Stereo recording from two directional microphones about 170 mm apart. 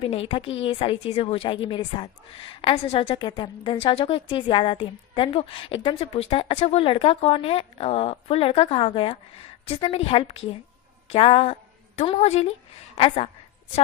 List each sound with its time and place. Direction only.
0.0 s a woman's voice: 35° left (ahead or behind)